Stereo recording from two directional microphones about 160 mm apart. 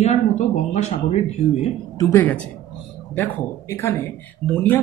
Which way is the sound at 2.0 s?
20° left (ahead or behind).